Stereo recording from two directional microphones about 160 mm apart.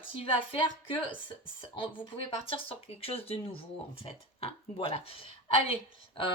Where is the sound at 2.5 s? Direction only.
40° left (ahead or behind).